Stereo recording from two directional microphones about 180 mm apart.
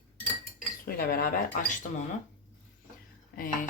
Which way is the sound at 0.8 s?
55° left (ahead or behind).